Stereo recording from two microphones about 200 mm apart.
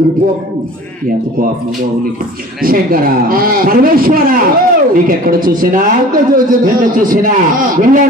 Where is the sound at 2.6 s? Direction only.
45° right (ahead or behind).